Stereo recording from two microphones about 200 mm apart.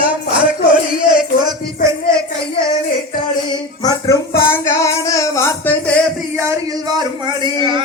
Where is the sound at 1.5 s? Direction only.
15° right (ahead or behind).